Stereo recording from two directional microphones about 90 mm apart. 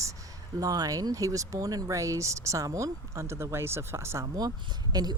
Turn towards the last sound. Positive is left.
turn(degrees=-50)  # may be behind; listen again after turning